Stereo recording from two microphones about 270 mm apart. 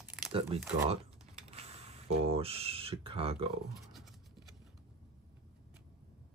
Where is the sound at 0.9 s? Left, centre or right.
Right.